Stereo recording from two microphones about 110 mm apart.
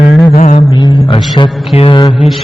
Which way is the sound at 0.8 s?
45° left (ahead or behind).